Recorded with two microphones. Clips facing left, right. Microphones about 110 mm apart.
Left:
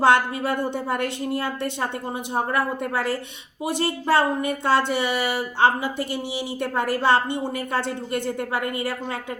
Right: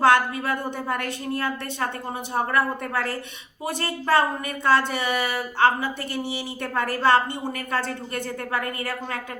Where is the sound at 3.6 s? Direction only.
20° left (ahead or behind).